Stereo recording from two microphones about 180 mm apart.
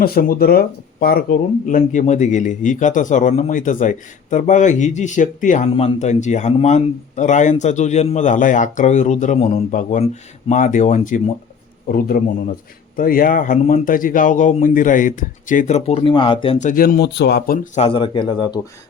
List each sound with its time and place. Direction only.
0.0 s a man's voice: 55° left (ahead or behind)
11.9 s speech: 55° left (ahead or behind); by 16.6 s 30° left (ahead or behind)
16.6 s speech: 50° left (ahead or behind)
17.7 s speech: 30° left (ahead or behind)